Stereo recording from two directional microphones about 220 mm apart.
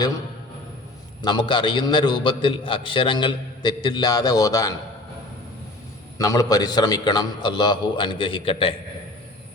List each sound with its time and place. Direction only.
1.2 s a man's voice: 20° left (ahead or behind)
6.1 s a man's voice: 15° left (ahead or behind)